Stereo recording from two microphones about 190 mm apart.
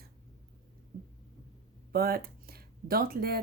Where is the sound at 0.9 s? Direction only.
45° right (ahead or behind).